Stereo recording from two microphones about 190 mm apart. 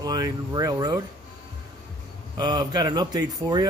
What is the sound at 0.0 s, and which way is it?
A man's voice, 20° right (ahead or behind).